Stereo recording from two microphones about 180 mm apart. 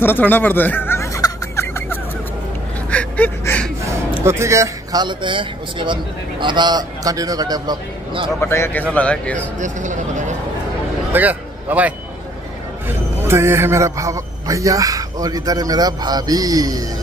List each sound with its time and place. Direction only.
0.0 s music: 10° left (ahead or behind)
2.9 s a sound: 10° left (ahead or behind)
4.2 s a man's voice: 15° right (ahead or behind)
8.4 s a man's voice: 15° left (ahead or behind)
9.6 s speech: 45° right (ahead or behind)
11.1 s a man's voice: 10° right (ahead or behind)